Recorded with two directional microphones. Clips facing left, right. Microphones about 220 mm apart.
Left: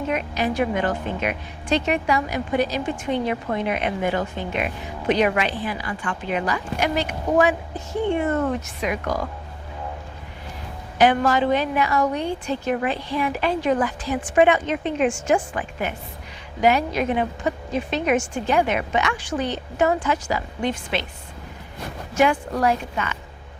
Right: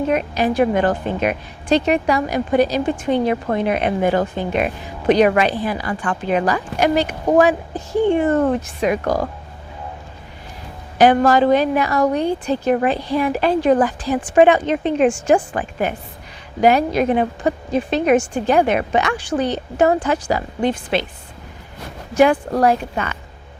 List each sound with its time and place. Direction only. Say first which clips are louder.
0.1 s a woman's voice: right 5 dB; 40° right (ahead or behind)
10.9 s a woman's voice: right 5 dB; 40° right (ahead or behind)
22.2 s a woman's voice: right 5 dB; 35° right (ahead or behind)